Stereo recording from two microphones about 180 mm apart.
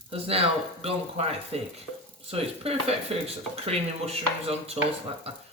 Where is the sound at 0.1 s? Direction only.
35° right (ahead or behind).